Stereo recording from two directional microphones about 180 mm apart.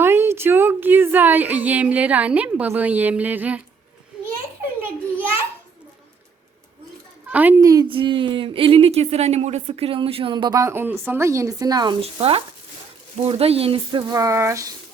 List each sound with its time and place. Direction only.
0.0 s a sound: 15° right (ahead or behind)
7.3 s a woman's voice: 10° right (ahead or behind)
7.6 s speech: 20° right (ahead or behind)
14.1 s speech: 20° right (ahead or behind)